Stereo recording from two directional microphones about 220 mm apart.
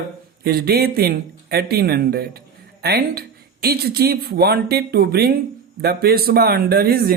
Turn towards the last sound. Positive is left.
turn(degrees=-45)  # may be behind; listen again after turning